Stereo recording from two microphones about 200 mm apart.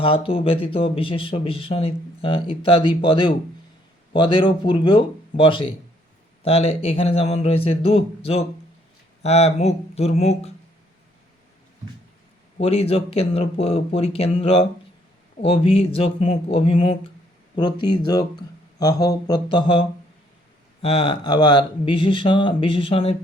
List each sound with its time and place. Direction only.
0.0 s speech: 25° left (ahead or behind)
12.5 s speech: 30° left (ahead or behind)
20.8 s speech: 30° left (ahead or behind)